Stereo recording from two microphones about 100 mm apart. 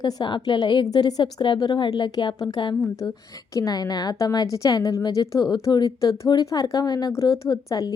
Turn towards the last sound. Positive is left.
turn(degrees=40)  # may be behind; listen again after turning